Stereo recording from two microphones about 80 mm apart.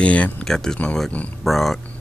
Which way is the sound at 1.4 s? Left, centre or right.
Centre.